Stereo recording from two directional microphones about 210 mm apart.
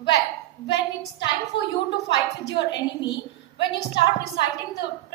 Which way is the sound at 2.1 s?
55° left (ahead or behind).